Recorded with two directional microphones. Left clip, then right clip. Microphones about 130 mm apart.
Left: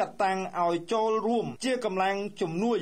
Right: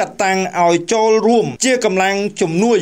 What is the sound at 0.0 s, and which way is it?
Speech, 30° right (ahead or behind).